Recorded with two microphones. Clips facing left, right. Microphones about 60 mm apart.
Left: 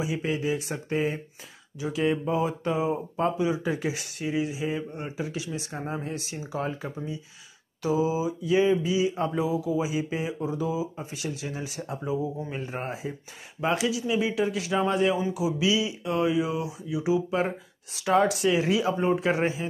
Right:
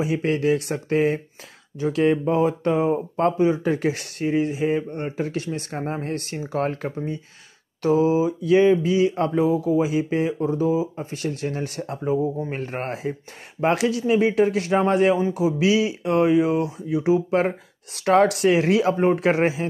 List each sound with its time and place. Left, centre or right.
0.0 s speech: right
1.8 s speech: right
15.2 s speech: right
17.9 s speech: right